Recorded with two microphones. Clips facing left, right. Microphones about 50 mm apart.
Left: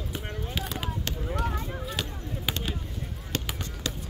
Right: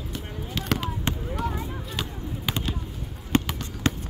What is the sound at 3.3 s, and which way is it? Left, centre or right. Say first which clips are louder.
Fireworks: right 10 dB; right.